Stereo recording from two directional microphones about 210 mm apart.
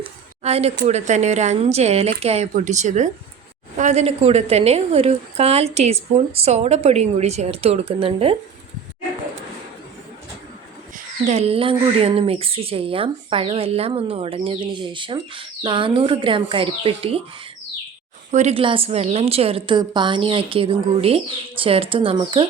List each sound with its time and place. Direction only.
0.4 s speech: 30° right (ahead or behind)
10.9 s speech: 30° right (ahead or behind)
18.3 s speech: 35° right (ahead or behind)